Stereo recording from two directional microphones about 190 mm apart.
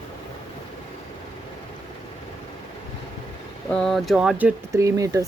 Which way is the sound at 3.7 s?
5° left (ahead or behind).